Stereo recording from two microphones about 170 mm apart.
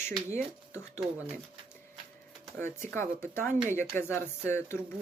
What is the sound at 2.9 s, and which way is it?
Speech, 15° left (ahead or behind).